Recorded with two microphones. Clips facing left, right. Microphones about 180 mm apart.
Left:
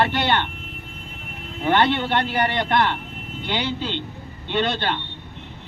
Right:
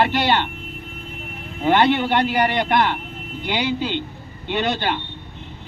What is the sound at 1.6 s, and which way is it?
Speech, 15° right (ahead or behind).